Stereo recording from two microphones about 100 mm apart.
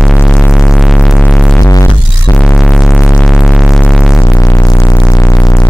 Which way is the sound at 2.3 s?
10° left (ahead or behind).